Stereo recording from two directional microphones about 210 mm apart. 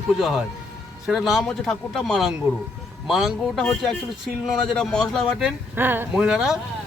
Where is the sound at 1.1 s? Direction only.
Centre (ahead or behind).